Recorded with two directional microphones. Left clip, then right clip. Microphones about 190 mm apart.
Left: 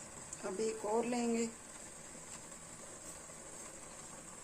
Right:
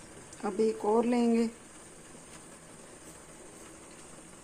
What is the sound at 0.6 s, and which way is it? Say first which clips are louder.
Speech: right 9 dB; 30° right (ahead or behind).